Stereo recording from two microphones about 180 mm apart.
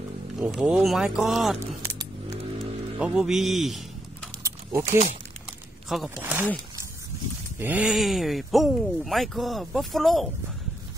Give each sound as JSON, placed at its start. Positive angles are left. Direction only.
{"t": 0.4, "sound": "speech", "side_deg": -5}
{"t": 1.8, "sound": "music", "side_deg": -20}
{"t": 2.6, "sound": "speech", "side_deg": 0}
{"t": 4.4, "sound": "a sound", "side_deg": -15}
{"t": 5.9, "sound": "speech", "side_deg": -5}
{"t": 7.5, "sound": "speech", "side_deg": -10}